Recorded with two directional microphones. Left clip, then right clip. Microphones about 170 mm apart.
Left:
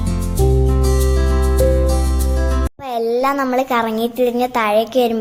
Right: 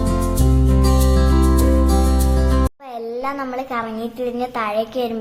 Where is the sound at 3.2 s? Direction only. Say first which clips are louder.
Left 8 dB; 45° left (ahead or behind).